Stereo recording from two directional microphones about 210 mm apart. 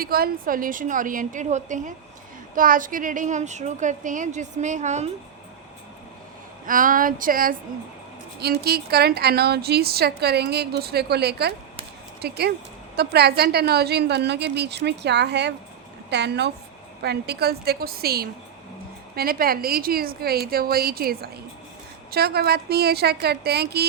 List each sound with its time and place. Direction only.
0.0 s a woman's voice: 45° right (ahead or behind)
6.7 s a woman's voice: 40° right (ahead or behind)